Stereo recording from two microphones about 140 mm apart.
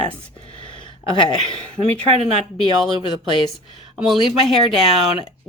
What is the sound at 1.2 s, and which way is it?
Speech, 35° left (ahead or behind).